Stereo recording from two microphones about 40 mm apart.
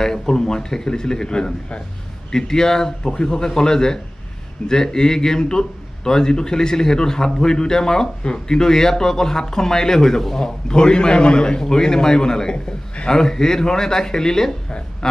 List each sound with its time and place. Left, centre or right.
0.0 s a man's voice: centre